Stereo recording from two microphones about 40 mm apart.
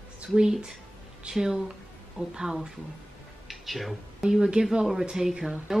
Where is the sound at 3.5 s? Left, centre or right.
Centre.